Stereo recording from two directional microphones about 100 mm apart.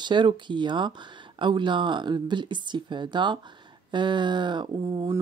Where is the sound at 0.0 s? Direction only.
50° right (ahead or behind).